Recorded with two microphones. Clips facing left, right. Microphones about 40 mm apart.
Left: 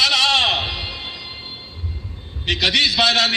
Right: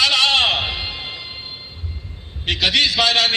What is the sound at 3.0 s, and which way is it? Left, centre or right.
Speech, right.